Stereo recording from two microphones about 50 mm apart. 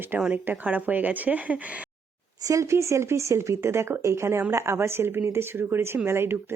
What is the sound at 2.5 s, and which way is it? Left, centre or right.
Speech, right.